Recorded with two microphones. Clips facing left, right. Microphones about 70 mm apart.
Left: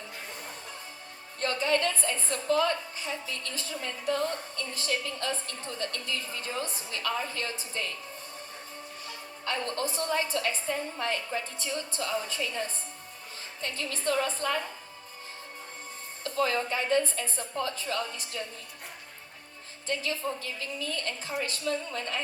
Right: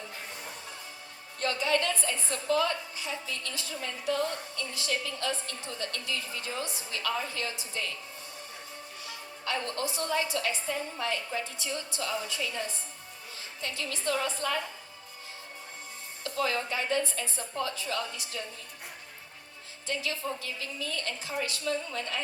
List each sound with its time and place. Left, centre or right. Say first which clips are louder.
1.4 s a woman's voice: left 1 dB; left
9.0 s a woman's voice: even; left
16.2 s a woman's voice: left 2 dB; left
19.9 s a woman's voice: left 2 dB; left